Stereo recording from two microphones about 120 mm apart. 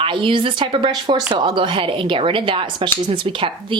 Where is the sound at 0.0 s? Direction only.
45° right (ahead or behind).